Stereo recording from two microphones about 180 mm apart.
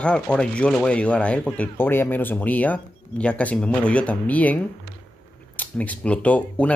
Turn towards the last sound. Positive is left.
turn(degrees=5)  # may be behind; listen again after turning